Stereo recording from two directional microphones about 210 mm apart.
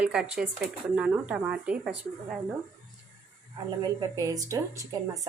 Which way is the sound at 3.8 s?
15° right (ahead or behind).